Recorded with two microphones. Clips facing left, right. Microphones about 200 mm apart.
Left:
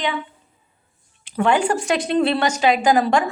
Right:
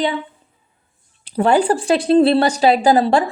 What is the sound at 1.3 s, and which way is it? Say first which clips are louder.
A woman's voice: right 4 dB; 35° right (ahead or behind).